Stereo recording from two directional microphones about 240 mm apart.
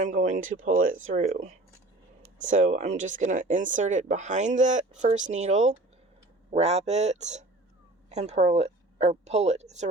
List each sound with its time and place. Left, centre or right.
0.1 s speech: right